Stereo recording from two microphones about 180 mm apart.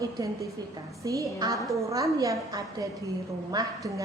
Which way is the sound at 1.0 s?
20° right (ahead or behind).